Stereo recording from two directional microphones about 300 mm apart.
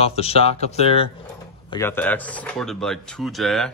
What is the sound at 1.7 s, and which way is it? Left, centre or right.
Speech, centre.